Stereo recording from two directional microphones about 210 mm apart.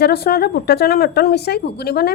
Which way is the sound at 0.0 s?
50° left (ahead or behind).